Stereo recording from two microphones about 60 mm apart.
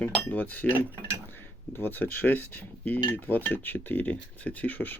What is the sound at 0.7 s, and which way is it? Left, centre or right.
Mechanisms, right.